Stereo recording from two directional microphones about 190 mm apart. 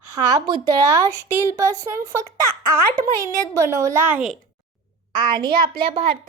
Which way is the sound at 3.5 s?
15° right (ahead or behind).